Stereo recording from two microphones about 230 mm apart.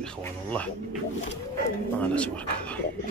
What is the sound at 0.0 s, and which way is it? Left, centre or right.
Speech, centre.